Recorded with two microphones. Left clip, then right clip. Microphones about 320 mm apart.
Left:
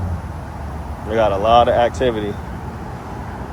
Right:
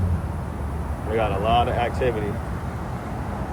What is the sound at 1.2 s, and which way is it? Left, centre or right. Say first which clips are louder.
Speech: left 8 dB; centre.